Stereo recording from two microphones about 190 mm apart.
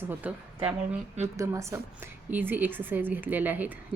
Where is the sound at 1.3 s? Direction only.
15° right (ahead or behind).